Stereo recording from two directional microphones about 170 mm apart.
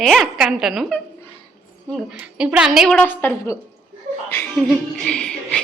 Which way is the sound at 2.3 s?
5° right (ahead or behind).